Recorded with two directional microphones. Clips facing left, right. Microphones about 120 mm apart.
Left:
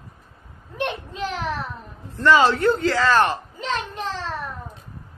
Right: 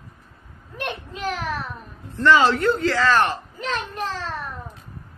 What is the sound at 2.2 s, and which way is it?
Speech, 25° left (ahead or behind).